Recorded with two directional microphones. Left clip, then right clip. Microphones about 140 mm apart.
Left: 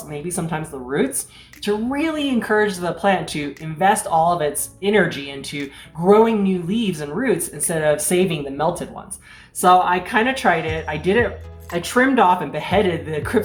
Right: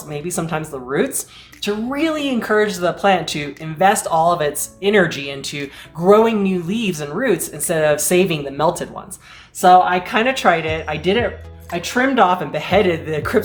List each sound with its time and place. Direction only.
0.1 s speech: 30° right (ahead or behind)